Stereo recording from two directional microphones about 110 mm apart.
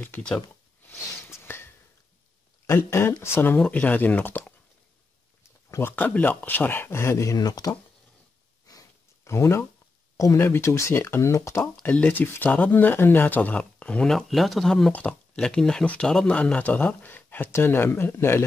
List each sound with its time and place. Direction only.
0.0 s speech: 15° left (ahead or behind)
0.8 s a sound: 20° left (ahead or behind)
2.6 s speech: 25° left (ahead or behind)
5.7 s speech: 20° left (ahead or behind); by 7.7 s 35° left (ahead or behind)
8.6 s a sound: 30° left (ahead or behind)
10.1 s speech: 25° left (ahead or behind)
11.9 s speech: 15° left (ahead or behind)